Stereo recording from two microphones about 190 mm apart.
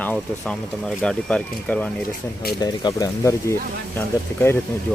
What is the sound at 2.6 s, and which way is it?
Speech, 20° left (ahead or behind).